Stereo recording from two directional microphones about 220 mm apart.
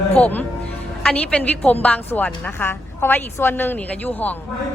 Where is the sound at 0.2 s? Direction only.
10° left (ahead or behind).